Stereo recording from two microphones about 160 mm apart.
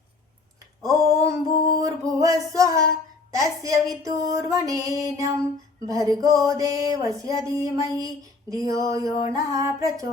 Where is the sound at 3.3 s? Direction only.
20° right (ahead or behind).